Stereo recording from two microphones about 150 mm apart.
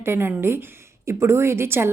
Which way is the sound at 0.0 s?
15° right (ahead or behind).